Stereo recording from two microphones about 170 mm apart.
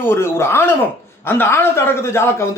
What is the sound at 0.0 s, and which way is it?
A man's voice, 15° left (ahead or behind).